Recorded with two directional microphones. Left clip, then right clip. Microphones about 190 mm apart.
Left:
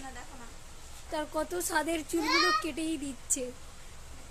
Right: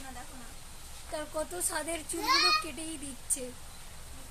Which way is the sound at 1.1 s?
30° left (ahead or behind).